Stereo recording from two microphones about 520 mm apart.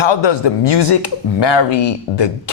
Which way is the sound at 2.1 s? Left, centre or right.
Left.